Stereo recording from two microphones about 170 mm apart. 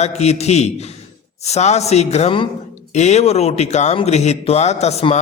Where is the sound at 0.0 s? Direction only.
40° left (ahead or behind).